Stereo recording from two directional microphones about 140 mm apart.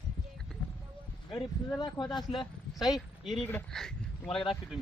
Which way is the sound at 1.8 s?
30° left (ahead or behind).